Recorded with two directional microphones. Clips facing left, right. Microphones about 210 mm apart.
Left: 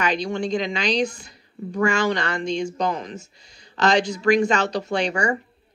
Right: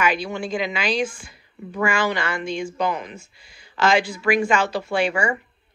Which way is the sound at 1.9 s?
5° right (ahead or behind).